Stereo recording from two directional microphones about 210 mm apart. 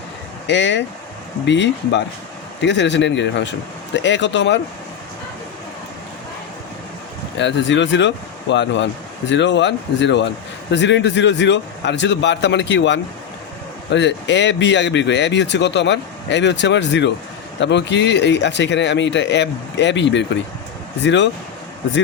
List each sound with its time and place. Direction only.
0.4 s speech: 55° left (ahead or behind)
7.3 s speech: 60° left (ahead or behind)